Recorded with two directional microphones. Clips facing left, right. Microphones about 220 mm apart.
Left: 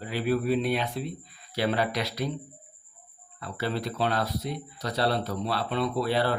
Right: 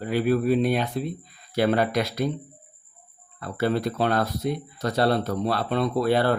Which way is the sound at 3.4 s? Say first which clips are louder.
Right 6 dB; 50° right (ahead or behind).